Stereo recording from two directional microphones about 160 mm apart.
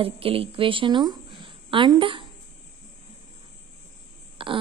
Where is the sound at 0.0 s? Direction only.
35° right (ahead or behind).